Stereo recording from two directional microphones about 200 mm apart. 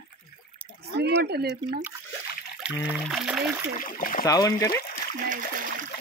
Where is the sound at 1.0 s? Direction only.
55° right (ahead or behind).